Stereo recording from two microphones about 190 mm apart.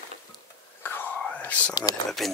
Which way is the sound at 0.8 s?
10° left (ahead or behind).